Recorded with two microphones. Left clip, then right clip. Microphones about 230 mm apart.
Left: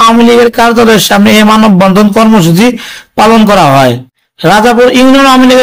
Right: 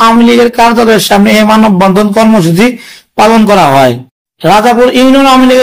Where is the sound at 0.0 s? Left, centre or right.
Left.